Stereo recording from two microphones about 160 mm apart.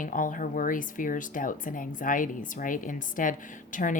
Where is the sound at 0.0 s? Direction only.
55° left (ahead or behind).